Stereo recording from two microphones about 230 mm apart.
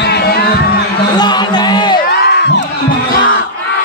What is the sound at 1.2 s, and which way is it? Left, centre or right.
Music, centre.